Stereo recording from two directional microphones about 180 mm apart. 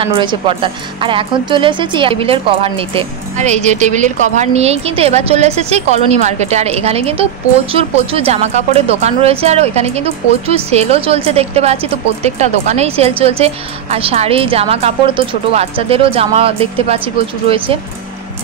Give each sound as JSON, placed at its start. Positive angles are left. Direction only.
{"t": 0.0, "sound": "a woman's voice", "side_deg": -30}